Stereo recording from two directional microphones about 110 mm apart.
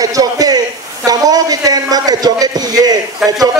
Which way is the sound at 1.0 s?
35° right (ahead or behind).